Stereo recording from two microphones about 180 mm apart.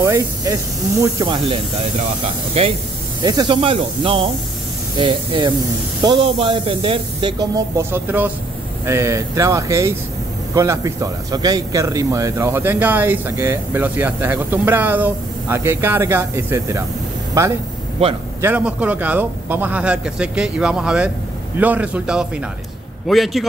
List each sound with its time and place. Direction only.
0.0 s speech: 15° right (ahead or behind)
1.2 s speech: 25° right (ahead or behind)
3.2 s a man's voice: 25° right (ahead or behind); by 23.4 s centre (ahead or behind)